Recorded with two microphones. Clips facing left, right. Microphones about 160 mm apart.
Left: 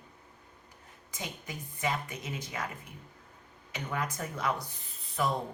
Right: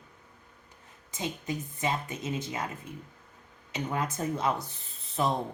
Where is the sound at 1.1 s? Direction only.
25° right (ahead or behind).